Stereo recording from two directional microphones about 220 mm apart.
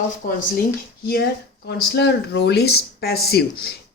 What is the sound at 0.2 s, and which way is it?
Speech, 40° left (ahead or behind).